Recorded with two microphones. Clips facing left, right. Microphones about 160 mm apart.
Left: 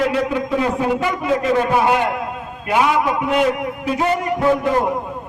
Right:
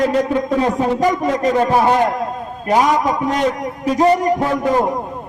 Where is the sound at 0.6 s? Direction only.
40° right (ahead or behind).